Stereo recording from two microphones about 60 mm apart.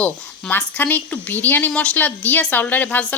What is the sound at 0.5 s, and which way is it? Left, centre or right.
A woman's voice, left.